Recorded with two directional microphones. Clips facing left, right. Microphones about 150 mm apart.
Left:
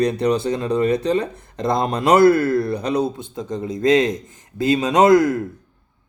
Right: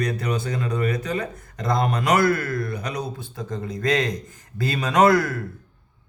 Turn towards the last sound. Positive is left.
turn(degrees=20)  # may be behind; listen again after turning